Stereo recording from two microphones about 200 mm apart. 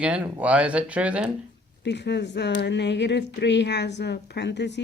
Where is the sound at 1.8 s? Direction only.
60° left (ahead or behind).